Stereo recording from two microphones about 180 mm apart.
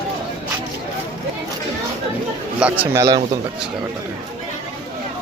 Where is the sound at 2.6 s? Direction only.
10° right (ahead or behind).